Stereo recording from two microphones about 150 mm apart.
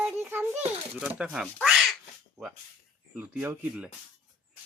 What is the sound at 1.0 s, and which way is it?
Speech, 5° right (ahead or behind).